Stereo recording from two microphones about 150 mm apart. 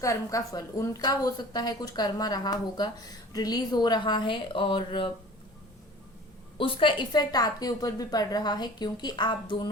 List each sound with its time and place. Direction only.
0.0 s a woman's voice: 20° left (ahead or behind)
6.6 s a woman's voice: 35° left (ahead or behind)